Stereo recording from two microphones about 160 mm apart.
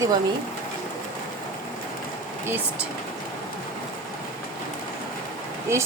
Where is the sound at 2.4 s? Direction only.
10° right (ahead or behind).